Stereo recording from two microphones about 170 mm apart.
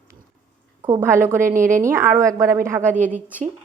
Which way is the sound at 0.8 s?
15° right (ahead or behind).